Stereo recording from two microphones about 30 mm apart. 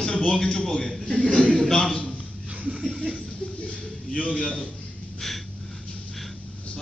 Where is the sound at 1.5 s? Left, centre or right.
Centre.